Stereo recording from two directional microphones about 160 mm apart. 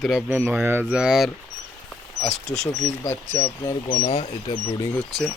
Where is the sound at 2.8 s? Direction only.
15° left (ahead or behind).